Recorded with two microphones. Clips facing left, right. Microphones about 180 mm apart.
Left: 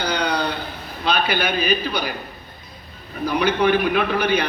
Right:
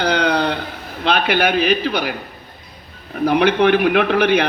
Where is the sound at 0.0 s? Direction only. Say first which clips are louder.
Right 5 dB; 60° right (ahead or behind).